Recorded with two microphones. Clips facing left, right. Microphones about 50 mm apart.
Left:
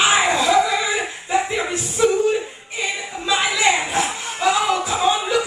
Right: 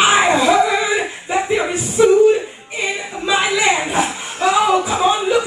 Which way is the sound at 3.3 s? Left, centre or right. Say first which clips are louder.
Right 3 dB; centre.